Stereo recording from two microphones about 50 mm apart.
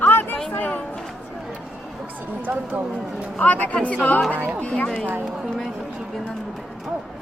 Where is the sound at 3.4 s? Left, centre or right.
Left.